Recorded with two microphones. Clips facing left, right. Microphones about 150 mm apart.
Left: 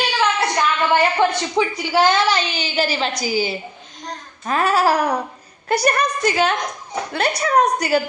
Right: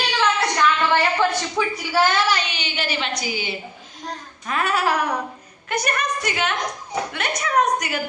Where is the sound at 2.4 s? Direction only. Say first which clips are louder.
Left 6 dB; 35° left (ahead or behind).